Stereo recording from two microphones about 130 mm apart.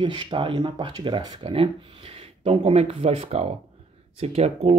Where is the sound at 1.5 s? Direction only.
45° right (ahead or behind).